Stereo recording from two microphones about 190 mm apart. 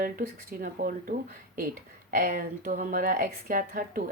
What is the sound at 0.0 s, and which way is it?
Speech, 45° right (ahead or behind).